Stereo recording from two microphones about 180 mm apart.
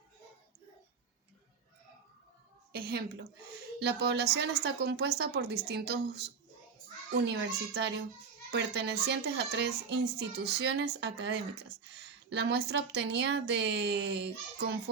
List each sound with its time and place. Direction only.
2.7 s a woman's voice: 60° right (ahead or behind)